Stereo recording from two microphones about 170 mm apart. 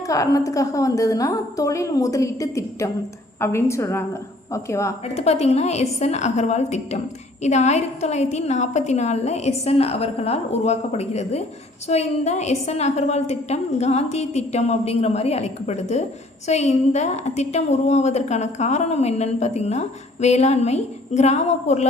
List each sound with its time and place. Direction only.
0.1 s a woman's voice: 20° left (ahead or behind)
5.0 s a woman's voice: 40° left (ahead or behind)